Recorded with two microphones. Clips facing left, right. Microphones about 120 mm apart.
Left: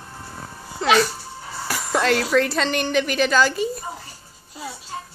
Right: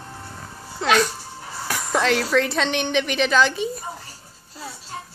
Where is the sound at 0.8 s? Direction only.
5° left (ahead or behind).